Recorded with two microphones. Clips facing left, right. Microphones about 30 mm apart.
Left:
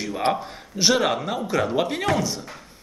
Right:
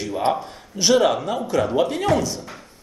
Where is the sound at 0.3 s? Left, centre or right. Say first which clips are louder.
Right 2 dB; centre.